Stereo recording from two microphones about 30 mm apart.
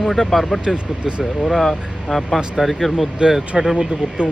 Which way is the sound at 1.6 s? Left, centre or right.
Centre.